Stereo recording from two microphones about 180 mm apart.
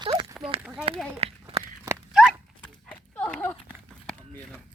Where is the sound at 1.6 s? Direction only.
15° right (ahead or behind).